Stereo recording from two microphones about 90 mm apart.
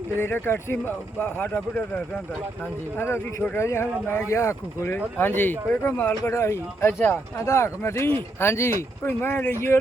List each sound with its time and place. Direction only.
0.2 s speech: 25° left (ahead or behind)
3.0 s speech: 30° left (ahead or behind)
7.0 s speech: 20° left (ahead or behind)
7.4 s speech: 30° left (ahead or behind)